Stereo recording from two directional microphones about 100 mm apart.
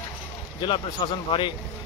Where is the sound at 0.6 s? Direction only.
55° left (ahead or behind).